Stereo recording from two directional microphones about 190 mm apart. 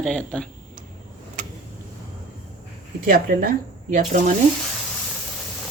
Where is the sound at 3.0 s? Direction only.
45° right (ahead or behind).